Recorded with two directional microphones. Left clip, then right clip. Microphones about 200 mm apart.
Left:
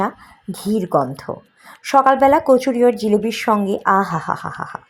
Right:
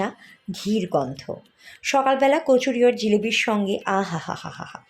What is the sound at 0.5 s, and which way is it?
Speech, 15° left (ahead or behind).